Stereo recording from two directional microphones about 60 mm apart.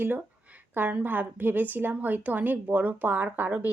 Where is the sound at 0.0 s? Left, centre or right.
Right.